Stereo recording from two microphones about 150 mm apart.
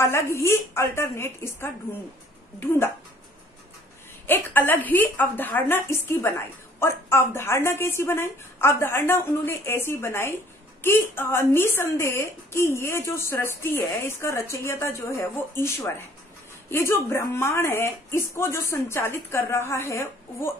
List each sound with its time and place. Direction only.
0.0 s a woman's voice: 20° left (ahead or behind)
4.3 s a woman's voice: 15° left (ahead or behind)